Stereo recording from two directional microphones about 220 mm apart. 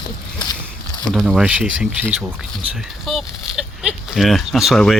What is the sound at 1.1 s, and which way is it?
Speech, centre (ahead or behind).